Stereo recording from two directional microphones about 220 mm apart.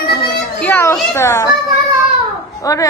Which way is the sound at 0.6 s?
10° left (ahead or behind).